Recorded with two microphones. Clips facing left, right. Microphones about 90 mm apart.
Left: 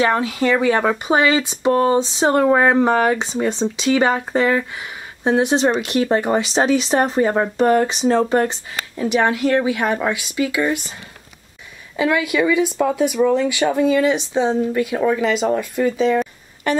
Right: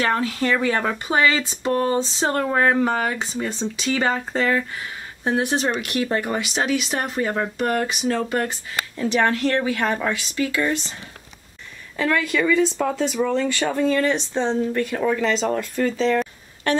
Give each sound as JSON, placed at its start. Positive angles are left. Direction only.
{"t": 0.0, "sound": "speech", "side_deg": 15}
{"t": 12.0, "sound": "speech", "side_deg": 10}